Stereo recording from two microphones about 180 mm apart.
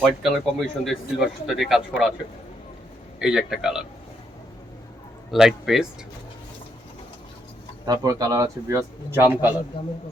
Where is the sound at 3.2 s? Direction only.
5° right (ahead or behind).